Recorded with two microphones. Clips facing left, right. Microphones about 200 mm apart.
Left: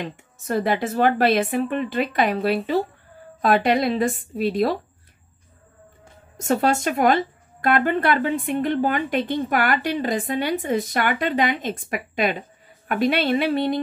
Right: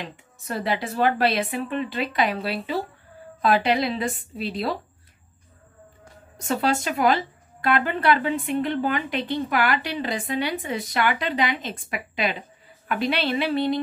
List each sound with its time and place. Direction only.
0.0 s speech: 45° left (ahead or behind)
6.4 s speech: 45° left (ahead or behind)